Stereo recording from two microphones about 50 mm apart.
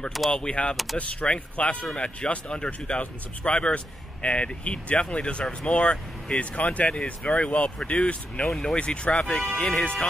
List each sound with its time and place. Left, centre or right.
0.3 s speech: left
8.5 s speech: centre
8.7 s speech: left